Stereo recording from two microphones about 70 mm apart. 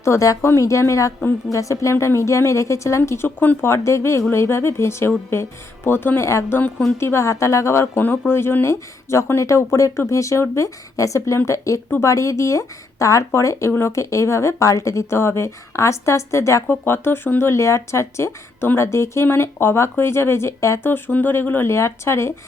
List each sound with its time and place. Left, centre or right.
0.0 s speech: left
3.2 s speech: left
3.7 s speech: left
7.9 s speech: left
20.9 s speech: left